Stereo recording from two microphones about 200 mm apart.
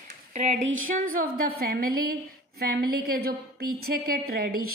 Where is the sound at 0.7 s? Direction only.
90° right.